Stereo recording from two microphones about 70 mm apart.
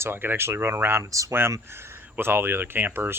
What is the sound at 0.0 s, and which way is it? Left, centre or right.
Speech, right.